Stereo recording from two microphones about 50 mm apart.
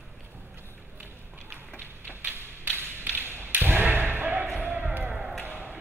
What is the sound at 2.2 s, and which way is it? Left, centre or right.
Thump, right.